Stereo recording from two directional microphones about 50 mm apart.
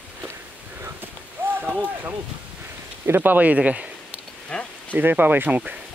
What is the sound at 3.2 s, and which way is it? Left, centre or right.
Speech, right.